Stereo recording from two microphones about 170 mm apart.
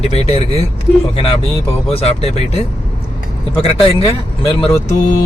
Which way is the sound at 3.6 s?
30° left (ahead or behind).